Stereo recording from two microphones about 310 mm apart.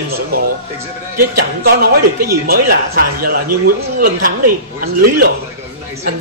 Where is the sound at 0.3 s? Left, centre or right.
Right.